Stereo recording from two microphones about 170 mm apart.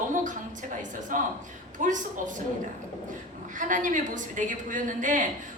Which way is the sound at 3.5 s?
50° right (ahead or behind).